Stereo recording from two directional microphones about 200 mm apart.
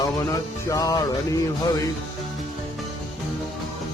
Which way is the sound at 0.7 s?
15° left (ahead or behind).